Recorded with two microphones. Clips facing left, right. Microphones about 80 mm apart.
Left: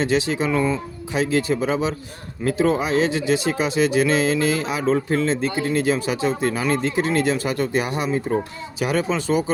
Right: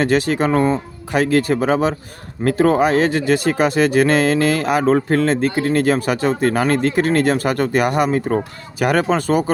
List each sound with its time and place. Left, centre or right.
0.0 s speech: right